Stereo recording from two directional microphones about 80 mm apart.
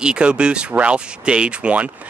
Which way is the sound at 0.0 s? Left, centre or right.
Centre.